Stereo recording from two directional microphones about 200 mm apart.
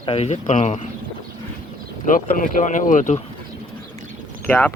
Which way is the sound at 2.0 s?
40° left (ahead or behind).